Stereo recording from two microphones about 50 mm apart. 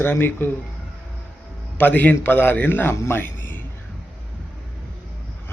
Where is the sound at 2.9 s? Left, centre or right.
Left.